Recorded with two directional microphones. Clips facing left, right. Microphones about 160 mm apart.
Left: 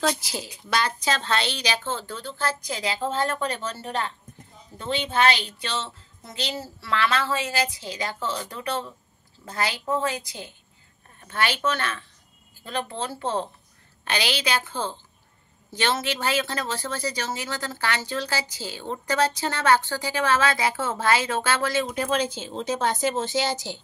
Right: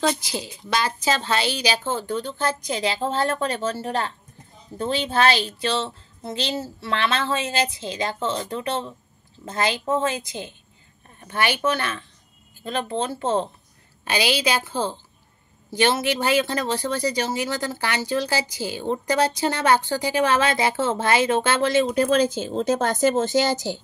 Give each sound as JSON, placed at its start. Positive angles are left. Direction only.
{"t": 0.0, "sound": "a woman's voice", "side_deg": 0}
{"t": 14.0, "sound": "speech", "side_deg": -10}
{"t": 21.9, "sound": "a woman's voice", "side_deg": -40}